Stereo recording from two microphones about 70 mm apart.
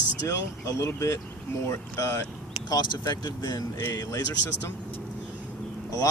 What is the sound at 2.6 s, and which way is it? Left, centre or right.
Speech, left.